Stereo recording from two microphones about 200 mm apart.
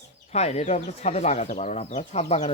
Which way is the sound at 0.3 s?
30° left (ahead or behind).